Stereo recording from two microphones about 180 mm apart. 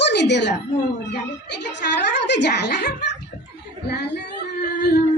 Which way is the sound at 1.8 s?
70° left (ahead or behind).